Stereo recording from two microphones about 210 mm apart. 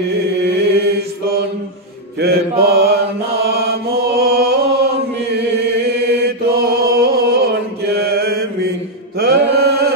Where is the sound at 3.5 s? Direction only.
50° right (ahead or behind).